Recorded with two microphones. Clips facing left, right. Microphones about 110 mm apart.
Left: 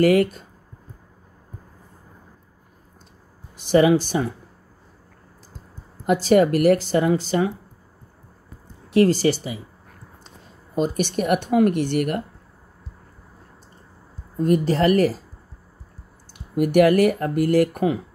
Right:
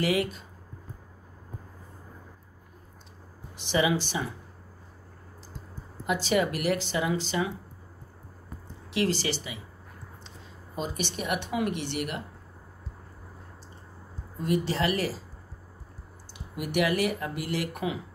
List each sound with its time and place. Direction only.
0.0 s speech: 50° left (ahead or behind)
3.5 s speech: 50° left (ahead or behind)
6.0 s speech: 45° left (ahead or behind)
8.9 s speech: 45° left (ahead or behind)
10.8 s speech: 50° left (ahead or behind)
14.4 s speech: 45° left (ahead or behind)
16.3 s speech: 50° left (ahead or behind)